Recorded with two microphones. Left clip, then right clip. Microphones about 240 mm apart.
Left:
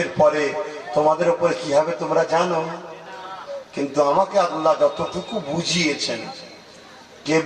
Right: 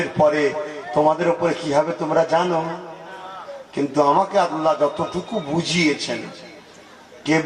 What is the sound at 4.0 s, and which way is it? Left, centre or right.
Speech, right.